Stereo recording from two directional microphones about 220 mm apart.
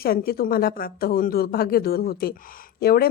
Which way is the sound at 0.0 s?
45° left (ahead or behind).